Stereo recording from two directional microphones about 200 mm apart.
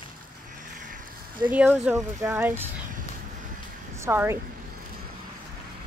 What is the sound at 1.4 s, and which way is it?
Speech, 10° right (ahead or behind).